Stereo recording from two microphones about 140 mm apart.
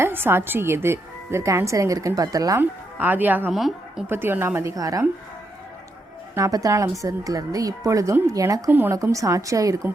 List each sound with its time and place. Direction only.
0.0 s a woman's voice: 15° right (ahead or behind)
2.6 s a woman's voice: 15° right (ahead or behind)
3.5 s a woman's voice: centre (ahead or behind)
4.0 s a woman's voice: 15° right (ahead or behind)
6.3 s a woman's voice: 25° right (ahead or behind)